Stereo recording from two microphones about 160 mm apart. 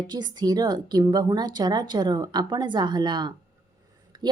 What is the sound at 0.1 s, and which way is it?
A woman's voice, 25° right (ahead or behind).